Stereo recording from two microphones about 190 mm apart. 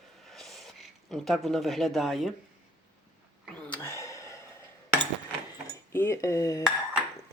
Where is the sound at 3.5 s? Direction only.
5° left (ahead or behind).